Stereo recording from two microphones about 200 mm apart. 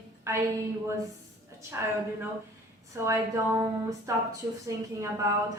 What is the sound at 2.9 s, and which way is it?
A woman's voice, 15° right (ahead or behind).